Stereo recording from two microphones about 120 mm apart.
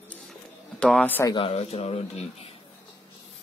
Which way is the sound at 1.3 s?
50° left (ahead or behind).